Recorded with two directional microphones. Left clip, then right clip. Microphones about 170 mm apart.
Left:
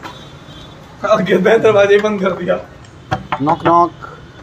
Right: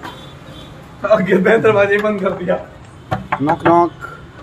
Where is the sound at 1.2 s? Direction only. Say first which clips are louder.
Left 4 dB; 40° left (ahead or behind).